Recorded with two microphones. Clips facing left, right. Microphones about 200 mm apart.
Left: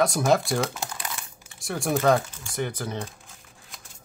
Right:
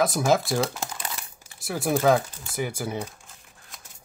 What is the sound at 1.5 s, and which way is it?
Speech, 5° right (ahead or behind).